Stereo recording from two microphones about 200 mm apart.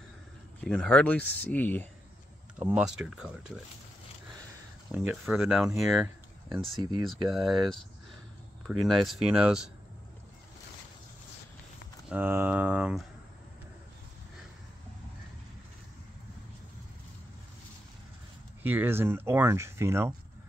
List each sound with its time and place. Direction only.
0.6 s speech: 5° left (ahead or behind)
2.6 s speech: 5° right (ahead or behind)
4.9 s speech: centre (ahead or behind)
6.8 s speech: 20° right (ahead or behind)
7.2 s speech: centre (ahead or behind)
12.1 s speech: 10° right (ahead or behind)
18.6 s speech: 10° right (ahead or behind)